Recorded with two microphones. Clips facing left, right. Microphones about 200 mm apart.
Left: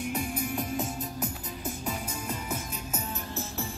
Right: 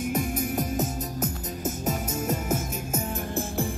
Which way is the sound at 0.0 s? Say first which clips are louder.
Right 4 dB; 45° right (ahead or behind).